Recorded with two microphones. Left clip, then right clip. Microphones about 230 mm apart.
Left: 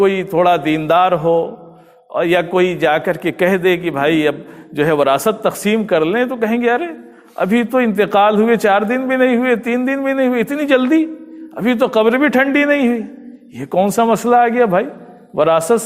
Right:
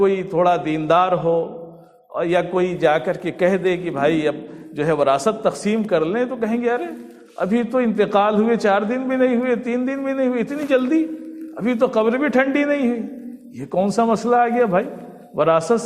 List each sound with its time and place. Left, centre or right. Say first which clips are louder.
0.0 s a man's voice: left 4 dB; left